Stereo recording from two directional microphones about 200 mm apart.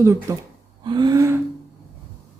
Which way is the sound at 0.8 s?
20° right (ahead or behind).